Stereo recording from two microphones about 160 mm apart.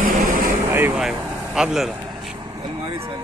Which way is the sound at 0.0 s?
60° right (ahead or behind).